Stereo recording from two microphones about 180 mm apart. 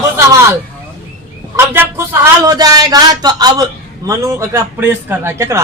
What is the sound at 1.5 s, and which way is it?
A man's voice, 15° right (ahead or behind).